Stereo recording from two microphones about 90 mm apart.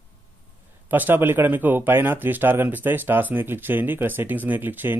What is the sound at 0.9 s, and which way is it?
Speech, 20° right (ahead or behind).